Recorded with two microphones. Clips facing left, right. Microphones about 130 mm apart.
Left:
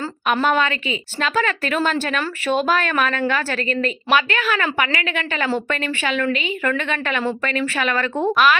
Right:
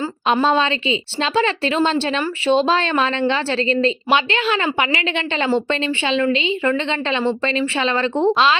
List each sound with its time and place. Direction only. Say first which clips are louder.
0.4 s speech: right 2 dB; 25° right (ahead or behind)